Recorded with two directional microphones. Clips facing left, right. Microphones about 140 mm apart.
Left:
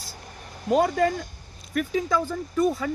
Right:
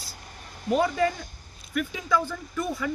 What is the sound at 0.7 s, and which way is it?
A man's voice, 45° left (ahead or behind).